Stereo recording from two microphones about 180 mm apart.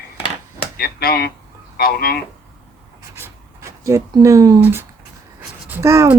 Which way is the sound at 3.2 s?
15° right (ahead or behind).